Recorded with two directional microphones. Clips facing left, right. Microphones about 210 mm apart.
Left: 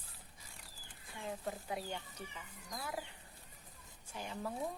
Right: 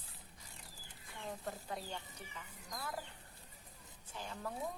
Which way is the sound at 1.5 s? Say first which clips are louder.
Left 3 dB; 10° left (ahead or behind).